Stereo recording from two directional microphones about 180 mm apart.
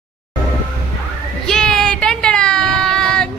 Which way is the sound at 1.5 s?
5° left (ahead or behind).